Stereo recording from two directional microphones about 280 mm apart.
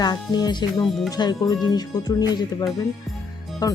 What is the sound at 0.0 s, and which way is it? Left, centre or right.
Speech, centre.